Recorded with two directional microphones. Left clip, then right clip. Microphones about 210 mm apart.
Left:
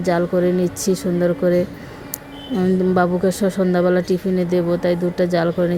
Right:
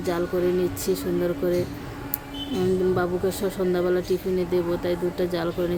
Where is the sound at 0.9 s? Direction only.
25° left (ahead or behind).